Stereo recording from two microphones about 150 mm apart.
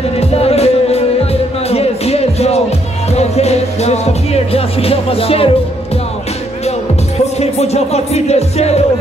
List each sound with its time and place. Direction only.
0.2 s music: 45° left (ahead or behind)
7.3 s music: 45° left (ahead or behind)